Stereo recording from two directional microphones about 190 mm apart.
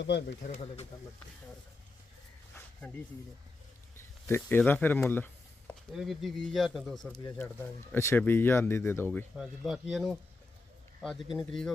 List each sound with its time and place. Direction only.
0.0 s speech: 65° left (ahead or behind)
0.4 s speech: 35° left (ahead or behind)
3.9 s a sound: 10° left (ahead or behind)
5.9 s speech: centre (ahead or behind)
7.1 s speech: 20° left (ahead or behind)
9.3 s speech: centre (ahead or behind)